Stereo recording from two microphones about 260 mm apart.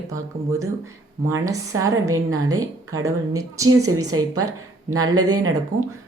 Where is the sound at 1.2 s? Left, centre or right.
Centre.